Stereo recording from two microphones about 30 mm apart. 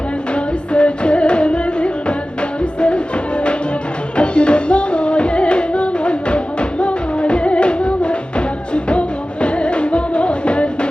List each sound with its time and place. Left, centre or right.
0.3 s music: left
4.2 s music: left